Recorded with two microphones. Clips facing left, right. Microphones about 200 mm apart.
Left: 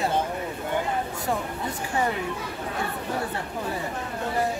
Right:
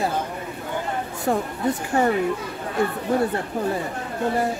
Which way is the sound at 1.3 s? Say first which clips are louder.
Right 7 dB; 60° right (ahead or behind).